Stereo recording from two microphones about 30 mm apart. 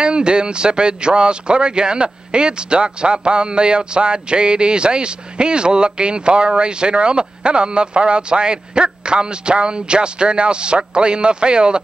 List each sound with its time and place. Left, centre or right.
0.0 s speech: right